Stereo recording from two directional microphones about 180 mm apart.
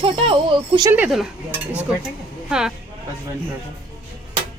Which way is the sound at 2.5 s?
5° right (ahead or behind).